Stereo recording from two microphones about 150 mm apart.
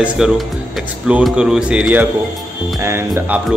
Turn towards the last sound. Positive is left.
turn(degrees=-15)  # may be behind; listen again after turning